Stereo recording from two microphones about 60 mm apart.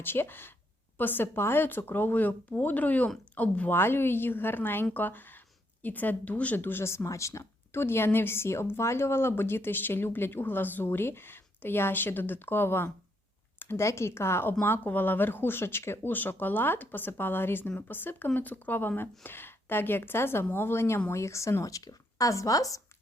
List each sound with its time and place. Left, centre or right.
0.0 s a woman's voice: left
3.8 s a woman's voice: left
6.8 s a woman's voice: left
16.1 s speech: left